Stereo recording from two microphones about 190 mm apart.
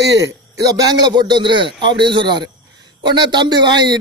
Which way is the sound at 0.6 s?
20° right (ahead or behind).